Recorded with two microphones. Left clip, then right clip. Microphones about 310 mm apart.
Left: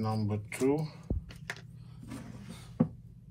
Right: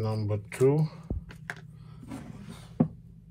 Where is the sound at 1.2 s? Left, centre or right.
Centre.